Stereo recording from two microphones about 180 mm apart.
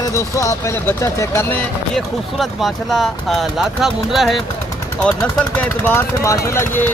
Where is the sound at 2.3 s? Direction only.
Centre (ahead or behind).